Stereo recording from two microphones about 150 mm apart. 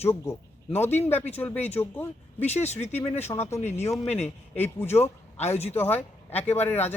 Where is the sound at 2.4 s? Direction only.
45° left (ahead or behind).